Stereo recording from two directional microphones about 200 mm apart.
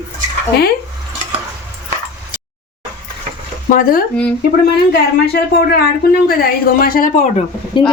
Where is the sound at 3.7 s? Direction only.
45° left (ahead or behind).